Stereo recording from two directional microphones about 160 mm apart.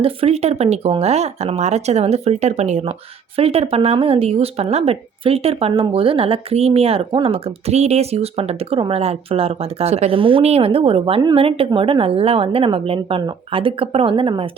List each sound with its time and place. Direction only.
0.0 s speech: 40° right (ahead or behind)